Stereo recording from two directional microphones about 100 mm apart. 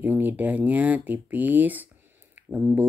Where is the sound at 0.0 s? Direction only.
20° right (ahead or behind).